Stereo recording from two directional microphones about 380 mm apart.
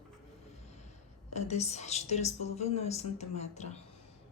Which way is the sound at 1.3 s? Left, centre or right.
Centre.